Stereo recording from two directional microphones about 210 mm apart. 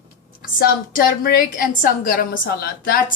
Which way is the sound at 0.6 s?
45° left (ahead or behind).